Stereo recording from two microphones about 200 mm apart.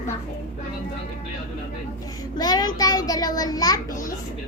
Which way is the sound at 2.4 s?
20° left (ahead or behind).